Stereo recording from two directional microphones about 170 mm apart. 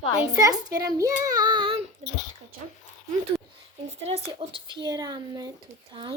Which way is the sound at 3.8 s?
35° right (ahead or behind).